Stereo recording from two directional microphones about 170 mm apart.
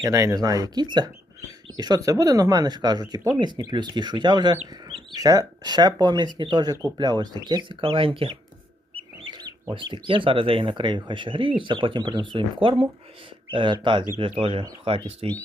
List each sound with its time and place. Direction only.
0.0 s speech: 20° right (ahead or behind)